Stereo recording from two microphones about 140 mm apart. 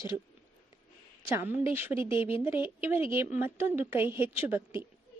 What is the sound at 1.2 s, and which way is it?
A woman's voice, 15° right (ahead or behind).